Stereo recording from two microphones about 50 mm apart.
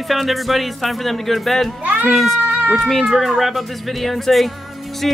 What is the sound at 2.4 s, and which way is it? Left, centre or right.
Cat, right.